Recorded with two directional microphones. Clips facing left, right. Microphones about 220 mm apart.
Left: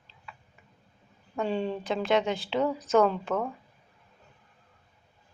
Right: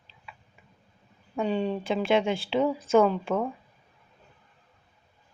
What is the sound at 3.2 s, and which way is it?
Speech, 15° right (ahead or behind).